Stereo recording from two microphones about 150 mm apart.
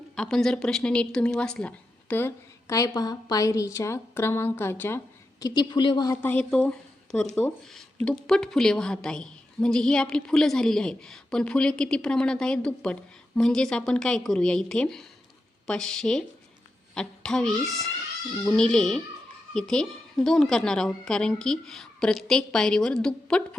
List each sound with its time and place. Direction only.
0.2 s a woman's voice: 5° left (ahead or behind)
5.4 s a woman's voice: 25° left (ahead or behind)
6.2 s a woman's voice: 10° left (ahead or behind)